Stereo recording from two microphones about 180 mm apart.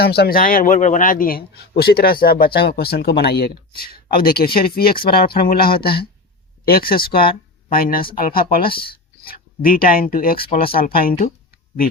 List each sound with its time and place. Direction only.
0.0 s a man's voice: 60° left (ahead or behind)